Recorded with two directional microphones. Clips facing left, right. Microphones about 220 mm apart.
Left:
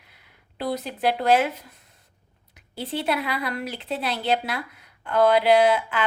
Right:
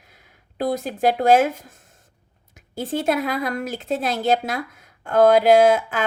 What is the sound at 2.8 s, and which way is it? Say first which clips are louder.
A woman's voice: right 4 dB; 45° right (ahead or behind).